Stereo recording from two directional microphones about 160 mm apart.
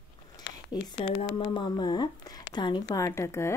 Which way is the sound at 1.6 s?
25° left (ahead or behind).